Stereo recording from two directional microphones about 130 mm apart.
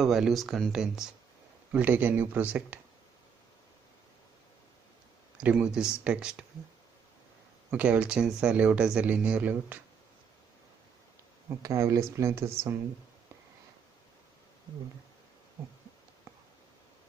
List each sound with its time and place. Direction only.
0.0 s speech: centre (ahead or behind)
5.4 s speech: 10° right (ahead or behind)
7.7 s speech: 10° right (ahead or behind)
11.4 s speech: 25° right (ahead or behind)